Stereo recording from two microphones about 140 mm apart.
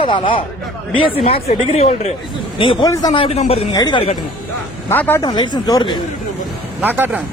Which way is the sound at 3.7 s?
25° left (ahead or behind).